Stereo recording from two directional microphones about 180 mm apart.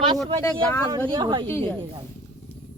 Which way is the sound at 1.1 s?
25° right (ahead or behind).